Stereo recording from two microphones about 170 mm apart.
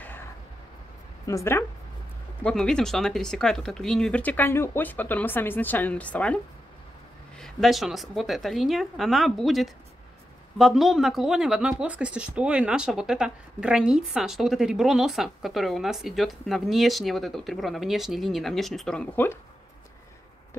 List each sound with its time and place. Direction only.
0.0 s vehicle: 10° left (ahead or behind)
1.2 s a woman's voice: 15° left (ahead or behind)
2.4 s speech: 5° left (ahead or behind)